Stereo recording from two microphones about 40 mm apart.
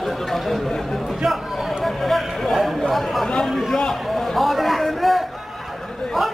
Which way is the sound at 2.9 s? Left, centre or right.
Centre.